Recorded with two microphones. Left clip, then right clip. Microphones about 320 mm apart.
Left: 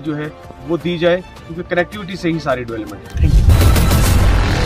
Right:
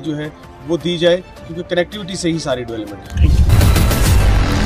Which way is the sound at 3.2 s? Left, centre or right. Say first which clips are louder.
Even; centre.